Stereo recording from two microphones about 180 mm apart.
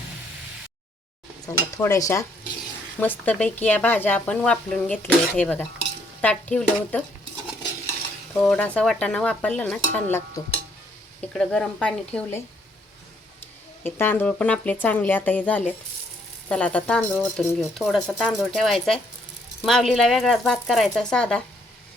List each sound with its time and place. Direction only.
1.5 s speech: 15° left (ahead or behind)
8.4 s speech: 5° left (ahead or behind)
13.8 s speech: 10° left (ahead or behind)